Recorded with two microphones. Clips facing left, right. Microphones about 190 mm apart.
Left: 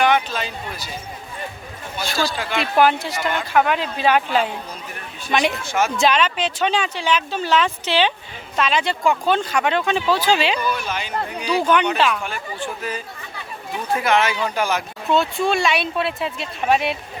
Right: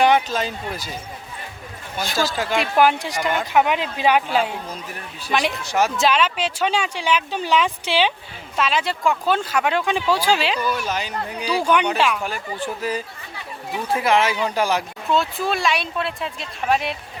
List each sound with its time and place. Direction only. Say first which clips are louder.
0.0 s speech: right 2 dB; 40° right (ahead or behind)
2.3 s speech: right 3 dB; 40° right (ahead or behind)
2.6 s speech: left 1 dB; 10° right (ahead or behind)
10.7 s speech: even; 40° right (ahead or behind)
11.4 s speech: left 1 dB; 10° right (ahead or behind)
12.2 s speech: right 1 dB; 35° right (ahead or behind)
15.1 s speech: left 3 dB; centre (ahead or behind)